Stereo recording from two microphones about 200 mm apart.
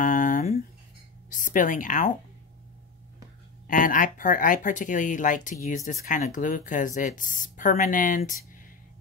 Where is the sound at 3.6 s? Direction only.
45° left (ahead or behind).